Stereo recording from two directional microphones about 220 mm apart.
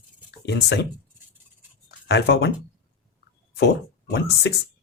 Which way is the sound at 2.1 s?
50° left (ahead or behind).